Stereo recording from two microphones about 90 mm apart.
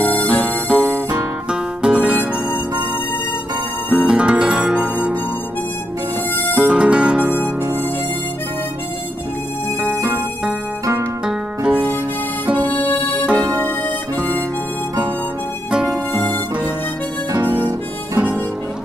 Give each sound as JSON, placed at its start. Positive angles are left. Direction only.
{"t": 0.0, "sound": "harmonica", "side_deg": 15}
{"t": 0.7, "sound": "music", "side_deg": -10}
{"t": 3.9, "sound": "music", "side_deg": -10}
{"t": 6.5, "sound": "music", "side_deg": -10}
{"t": 11.7, "sound": "music", "side_deg": 20}
{"t": 12.6, "sound": "harmonica", "side_deg": 20}
{"t": 15.7, "sound": "music", "side_deg": -10}
{"t": 17.4, "sound": "harmonica", "side_deg": -25}